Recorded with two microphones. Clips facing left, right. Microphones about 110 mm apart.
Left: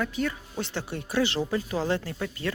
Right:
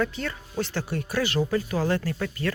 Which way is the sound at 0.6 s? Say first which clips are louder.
Right 4 dB; 20° left (ahead or behind).